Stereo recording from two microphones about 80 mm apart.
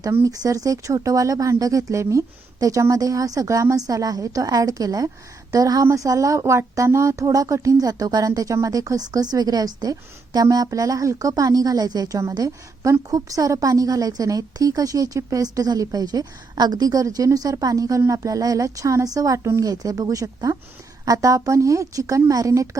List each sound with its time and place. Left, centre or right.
0.3 s speech: right